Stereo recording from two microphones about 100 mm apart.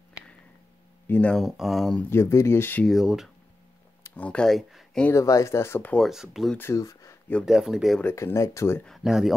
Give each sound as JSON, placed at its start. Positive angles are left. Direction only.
{"t": 1.0, "sound": "speech", "side_deg": 20}
{"t": 1.3, "sound": "speech", "side_deg": 0}
{"t": 2.0, "sound": "speech", "side_deg": 25}
{"t": 2.8, "sound": "speech", "side_deg": 0}
{"t": 4.1, "sound": "speech", "side_deg": 10}
{"t": 5.1, "sound": "speech", "side_deg": 30}
{"t": 6.0, "sound": "speech", "side_deg": -5}
{"t": 6.6, "sound": "speech", "side_deg": 30}
{"t": 7.4, "sound": "speech", "side_deg": -5}
{"t": 8.0, "sound": "speech", "side_deg": 25}
{"t": 8.8, "sound": "speech", "side_deg": 0}